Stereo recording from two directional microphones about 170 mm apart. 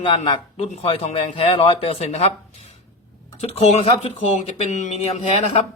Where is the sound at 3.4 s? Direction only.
40° left (ahead or behind).